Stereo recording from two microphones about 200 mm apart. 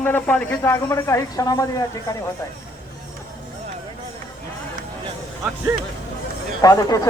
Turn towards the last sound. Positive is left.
turn(degrees=20)  # may be behind; listen again after turning